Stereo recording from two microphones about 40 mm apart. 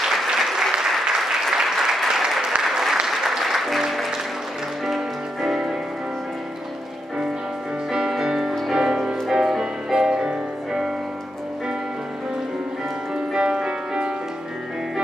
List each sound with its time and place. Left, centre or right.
0.0 s applause: centre
4.8 s music: centre
7.9 s music: centre
13.3 s music: centre